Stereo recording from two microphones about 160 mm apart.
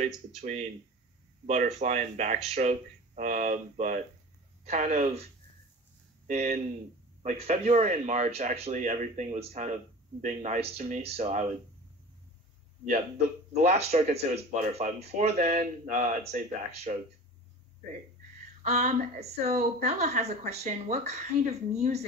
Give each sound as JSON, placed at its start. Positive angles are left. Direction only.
{"t": 0.0, "sound": "speech", "side_deg": -45}
{"t": 1.4, "sound": "speech", "side_deg": -55}
{"t": 6.2, "sound": "speech", "side_deg": -50}
{"t": 13.5, "sound": "speech", "side_deg": -45}
{"t": 18.6, "sound": "speech", "side_deg": -45}